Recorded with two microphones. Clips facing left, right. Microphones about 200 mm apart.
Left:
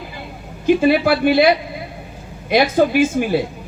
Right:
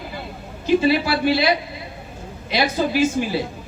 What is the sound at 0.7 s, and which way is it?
Speech, 55° left (ahead or behind).